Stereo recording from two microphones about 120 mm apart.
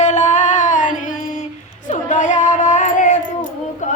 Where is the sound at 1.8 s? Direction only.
90° left.